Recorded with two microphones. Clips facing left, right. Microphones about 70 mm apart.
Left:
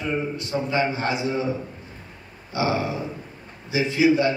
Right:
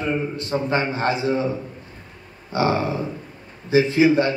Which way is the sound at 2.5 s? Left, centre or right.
Right.